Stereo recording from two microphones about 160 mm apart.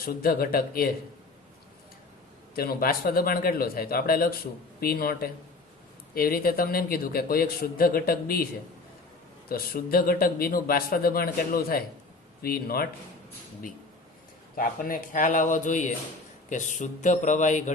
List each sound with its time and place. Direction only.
0.0 s a man's voice: 70° left (ahead or behind)
2.6 s a man's voice: 65° left (ahead or behind)
9.5 s a man's voice: 70° left (ahead or behind)
14.5 s a man's voice: 60° left (ahead or behind)